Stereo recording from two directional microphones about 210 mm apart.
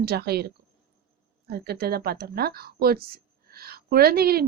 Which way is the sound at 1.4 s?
50° right (ahead or behind).